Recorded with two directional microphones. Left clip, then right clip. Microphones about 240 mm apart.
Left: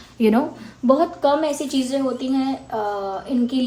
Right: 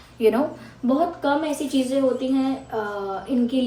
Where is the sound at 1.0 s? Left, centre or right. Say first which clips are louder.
Left 3 dB; left.